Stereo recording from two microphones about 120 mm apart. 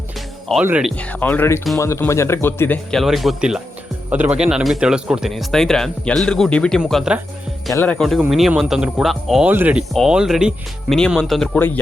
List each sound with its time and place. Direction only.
0.5 s speech: centre (ahead or behind)
0.9 s speech: 15° left (ahead or behind)
3.0 s speech: centre (ahead or behind)
9.5 s speech: 15° right (ahead or behind)
9.9 s speech: 5° right (ahead or behind)